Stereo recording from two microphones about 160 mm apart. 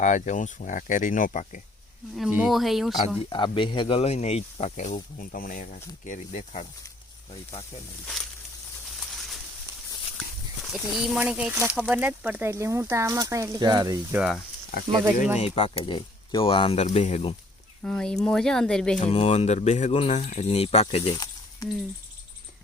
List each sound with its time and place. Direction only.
0.0 s speech: 50° left (ahead or behind)
2.1 s speech: 5° right (ahead or behind)
3.2 s speech: 30° left (ahead or behind); by 6.7 s 45° left (ahead or behind)
8.0 s speech: centre (ahead or behind)
9.0 s bird: centre (ahead or behind)
10.7 s speech: 5° right (ahead or behind); by 14.0 s 25° right (ahead or behind)
15.4 s speech: 35° left (ahead or behind)
16.8 s speech: 45° left (ahead or behind)
17.8 s speech: 5° left (ahead or behind)
18.9 s speech: 40° left (ahead or behind)